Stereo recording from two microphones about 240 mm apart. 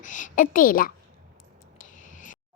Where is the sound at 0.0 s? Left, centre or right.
Left.